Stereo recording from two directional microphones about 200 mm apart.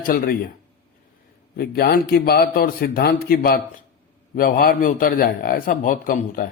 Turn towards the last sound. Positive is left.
turn(degrees=45)  # may be behind; listen again after turning